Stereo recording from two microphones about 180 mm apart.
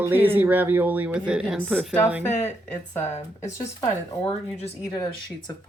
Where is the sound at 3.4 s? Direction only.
15° left (ahead or behind).